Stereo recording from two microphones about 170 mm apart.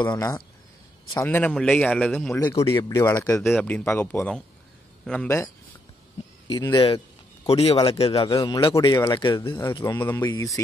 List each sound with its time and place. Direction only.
0.0 s a man's voice: 20° left (ahead or behind); by 2.4 s 5° left (ahead or behind)
2.4 s a man's voice: 20° left (ahead or behind)
3.4 s a man's voice: 5° left (ahead or behind)
6.4 s speech: 25° left (ahead or behind)
7.4 s a man's voice: 35° left (ahead or behind)
9.9 s a man's voice: 10° left (ahead or behind)
10.2 s speech: 20° left (ahead or behind)